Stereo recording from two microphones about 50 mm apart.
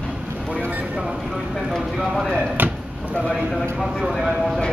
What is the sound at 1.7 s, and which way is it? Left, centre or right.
Speech, centre.